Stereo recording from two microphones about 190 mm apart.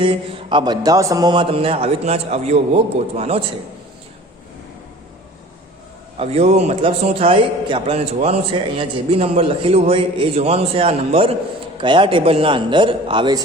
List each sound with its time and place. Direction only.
0.0 s a man's voice: 25° right (ahead or behind)
6.1 s a man's voice: 30° right (ahead or behind)